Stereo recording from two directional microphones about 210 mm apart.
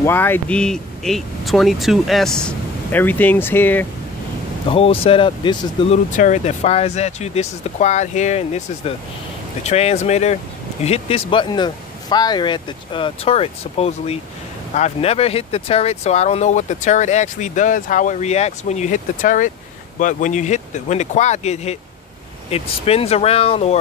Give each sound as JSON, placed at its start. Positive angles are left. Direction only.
{"t": 0.0, "sound": "speech", "side_deg": 10}
{"t": 4.6, "sound": "speech", "side_deg": 25}
{"t": 6.0, "sound": "speech", "side_deg": 35}